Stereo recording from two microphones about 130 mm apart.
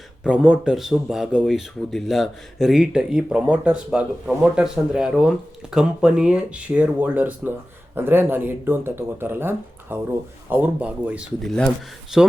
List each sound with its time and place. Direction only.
0.2 s speech: 10° right (ahead or behind)
11.4 s speech: 5° left (ahead or behind)
12.1 s speech: 5° right (ahead or behind)